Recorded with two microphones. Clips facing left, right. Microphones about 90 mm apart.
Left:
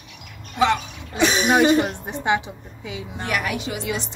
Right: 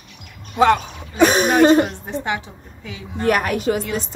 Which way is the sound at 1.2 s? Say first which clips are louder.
Right 4 dB; 50° right (ahead or behind).